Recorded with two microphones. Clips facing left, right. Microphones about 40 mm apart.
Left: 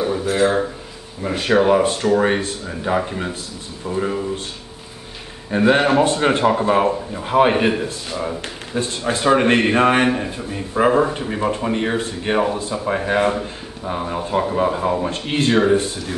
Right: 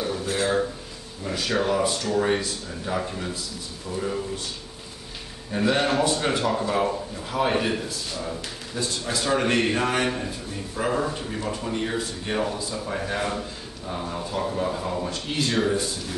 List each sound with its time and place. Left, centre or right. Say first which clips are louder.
0.0 s a sound: left 8 dB; left
1.2 s a man's voice: left 9 dB; left
5.5 s a man's voice: left 7 dB; left
7.5 s a man's voice: left 6 dB; left